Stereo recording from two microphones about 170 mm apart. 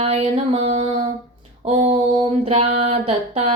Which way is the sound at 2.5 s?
35° right (ahead or behind).